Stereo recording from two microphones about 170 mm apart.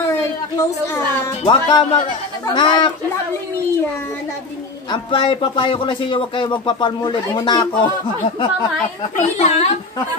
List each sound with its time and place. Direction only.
0.1 s a sound: 15° left (ahead or behind)
1.4 s speech: 30° left (ahead or behind)
4.9 s speech: 30° left (ahead or behind)
9.4 s speech: 40° left (ahead or behind)